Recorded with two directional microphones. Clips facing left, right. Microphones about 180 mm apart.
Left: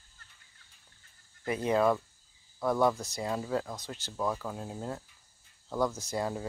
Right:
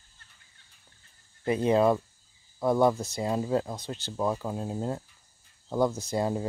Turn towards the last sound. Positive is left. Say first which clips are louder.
# right 5 dB
turn(degrees=-25)  # may be behind; listen again after turning